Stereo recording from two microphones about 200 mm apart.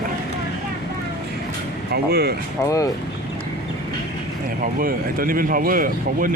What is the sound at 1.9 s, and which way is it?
Speech, 50° right (ahead or behind).